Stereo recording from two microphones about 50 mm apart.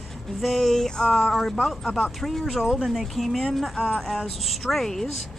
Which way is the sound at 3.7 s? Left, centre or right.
Centre.